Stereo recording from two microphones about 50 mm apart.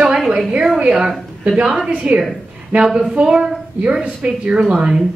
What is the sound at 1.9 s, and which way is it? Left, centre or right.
Speech, right.